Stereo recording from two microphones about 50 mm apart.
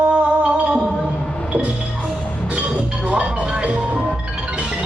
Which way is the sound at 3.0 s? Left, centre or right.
Right.